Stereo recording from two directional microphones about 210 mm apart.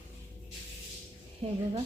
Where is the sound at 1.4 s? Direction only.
30° right (ahead or behind).